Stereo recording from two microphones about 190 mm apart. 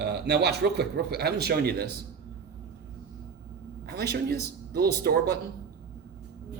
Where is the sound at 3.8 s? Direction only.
55° right (ahead or behind).